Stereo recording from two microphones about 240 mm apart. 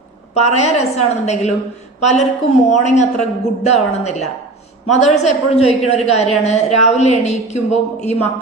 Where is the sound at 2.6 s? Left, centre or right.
Left.